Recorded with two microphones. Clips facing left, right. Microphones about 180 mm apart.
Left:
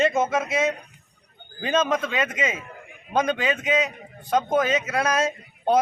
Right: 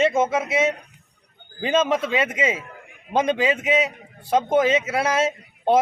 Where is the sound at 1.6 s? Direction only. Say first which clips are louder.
Right 2 dB; 25° right (ahead or behind).